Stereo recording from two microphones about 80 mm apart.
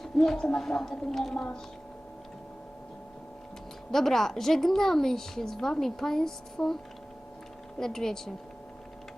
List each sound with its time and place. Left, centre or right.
0.0 s a woman's voice: centre
3.9 s a woman's voice: centre
7.8 s speech: centre